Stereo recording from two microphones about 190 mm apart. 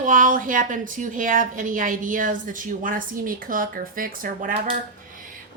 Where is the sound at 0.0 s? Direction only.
45° right (ahead or behind).